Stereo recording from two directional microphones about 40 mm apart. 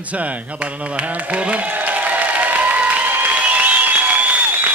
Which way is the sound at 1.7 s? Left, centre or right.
Right.